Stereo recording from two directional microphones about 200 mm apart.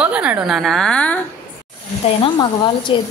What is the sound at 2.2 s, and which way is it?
Speech, 25° left (ahead or behind).